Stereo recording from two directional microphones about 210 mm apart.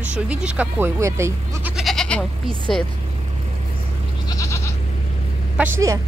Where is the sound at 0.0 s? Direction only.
5° right (ahead or behind).